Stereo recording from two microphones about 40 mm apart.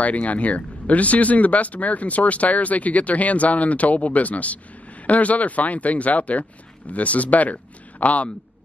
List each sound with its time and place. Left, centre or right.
0.0 s speech: left